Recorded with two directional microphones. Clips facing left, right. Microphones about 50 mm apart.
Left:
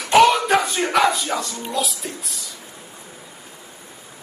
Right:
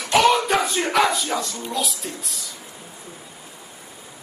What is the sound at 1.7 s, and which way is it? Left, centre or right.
Speech, centre.